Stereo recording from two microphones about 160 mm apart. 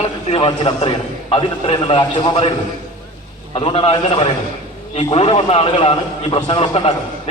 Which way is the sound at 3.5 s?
40° left (ahead or behind).